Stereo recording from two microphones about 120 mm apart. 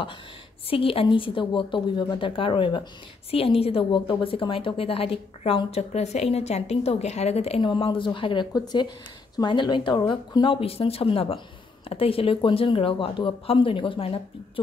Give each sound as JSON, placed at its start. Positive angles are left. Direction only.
{"t": 0.7, "sound": "a woman's voice", "side_deg": 50}
{"t": 7.6, "sound": "a woman's voice", "side_deg": 45}